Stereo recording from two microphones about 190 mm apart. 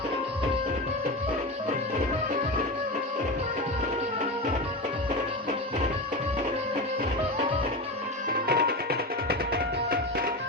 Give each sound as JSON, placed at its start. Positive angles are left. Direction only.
{"t": 8.3, "sound": "music", "side_deg": -55}
{"t": 9.5, "sound": "tabla", "side_deg": -50}